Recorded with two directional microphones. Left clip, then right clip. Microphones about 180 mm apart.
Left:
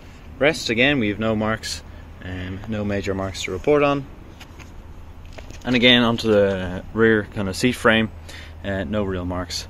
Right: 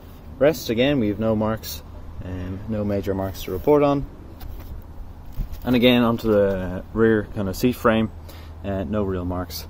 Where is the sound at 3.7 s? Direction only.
5° right (ahead or behind).